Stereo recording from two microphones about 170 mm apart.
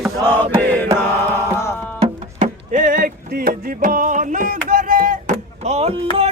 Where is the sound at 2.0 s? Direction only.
40° right (ahead or behind).